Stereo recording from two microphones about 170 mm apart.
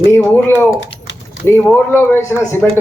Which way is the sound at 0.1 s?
10° left (ahead or behind).